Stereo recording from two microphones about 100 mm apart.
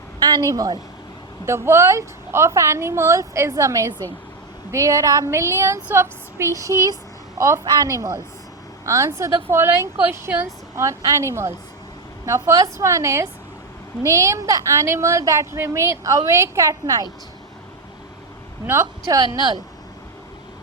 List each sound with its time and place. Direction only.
0.2 s a woman's voice: 40° right (ahead or behind)
1.5 s a woman's voice: 25° right (ahead or behind)
18.6 s a woman's voice: 30° right (ahead or behind)